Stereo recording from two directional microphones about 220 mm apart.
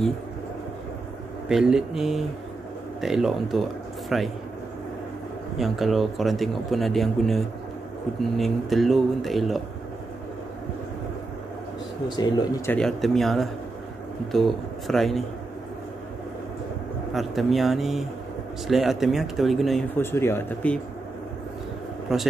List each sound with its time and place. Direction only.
1.5 s speech: centre (ahead or behind)
5.6 s speech: centre (ahead or behind)
12.2 s speech: 20° left (ahead or behind)
12.7 s speech: centre (ahead or behind)
17.1 s speech: centre (ahead or behind)
20.0 s speech: 10° left (ahead or behind)